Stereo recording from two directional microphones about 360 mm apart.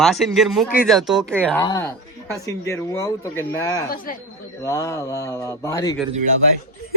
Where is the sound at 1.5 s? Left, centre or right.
Centre.